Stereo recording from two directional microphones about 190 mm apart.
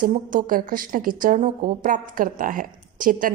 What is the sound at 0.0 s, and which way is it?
Speech, 45° right (ahead or behind).